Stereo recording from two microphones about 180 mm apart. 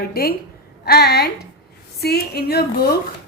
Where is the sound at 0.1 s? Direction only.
55° left (ahead or behind).